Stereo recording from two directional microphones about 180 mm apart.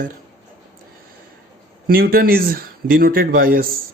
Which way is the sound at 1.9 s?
55° right (ahead or behind).